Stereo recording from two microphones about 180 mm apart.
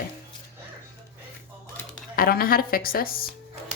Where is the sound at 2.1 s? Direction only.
55° left (ahead or behind).